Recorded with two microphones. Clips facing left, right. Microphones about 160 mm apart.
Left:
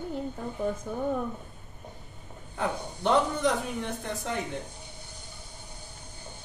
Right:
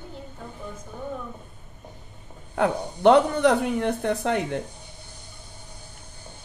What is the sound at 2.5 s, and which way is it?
Speech, 70° right (ahead or behind).